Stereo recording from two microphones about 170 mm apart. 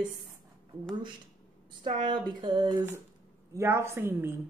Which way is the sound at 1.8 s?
30° right (ahead or behind).